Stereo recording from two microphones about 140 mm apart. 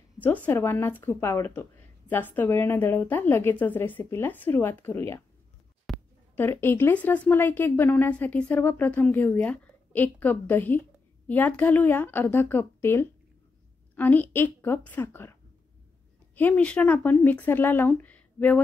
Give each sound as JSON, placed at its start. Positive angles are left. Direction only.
{"t": 0.5, "sound": "a woman's voice", "side_deg": 15}
{"t": 5.9, "sound": "a sound", "side_deg": 0}
{"t": 6.3, "sound": "a woman's voice", "side_deg": 15}
{"t": 16.3, "sound": "a woman's voice", "side_deg": 10}